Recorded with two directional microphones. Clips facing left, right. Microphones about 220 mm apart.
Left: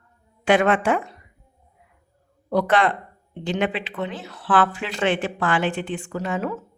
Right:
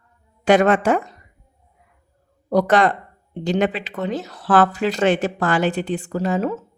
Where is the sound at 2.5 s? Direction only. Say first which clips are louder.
Right 3 dB; 40° right (ahead or behind).